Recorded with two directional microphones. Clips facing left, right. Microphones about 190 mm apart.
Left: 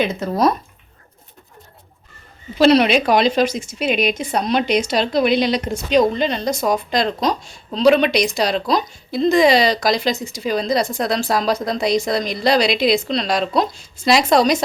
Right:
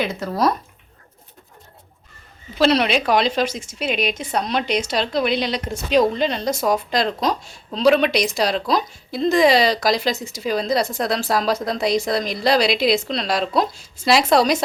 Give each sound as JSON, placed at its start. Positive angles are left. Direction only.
{"t": 0.0, "sound": "speech", "side_deg": 20}
{"t": 2.6, "sound": "speech", "side_deg": 5}
{"t": 5.9, "sound": "speech", "side_deg": -5}